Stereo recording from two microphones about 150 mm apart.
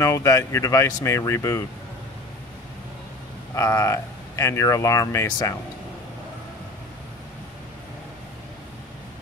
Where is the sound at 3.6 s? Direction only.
20° left (ahead or behind).